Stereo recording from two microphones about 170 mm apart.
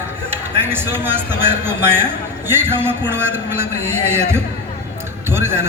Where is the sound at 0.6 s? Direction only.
10° right (ahead or behind).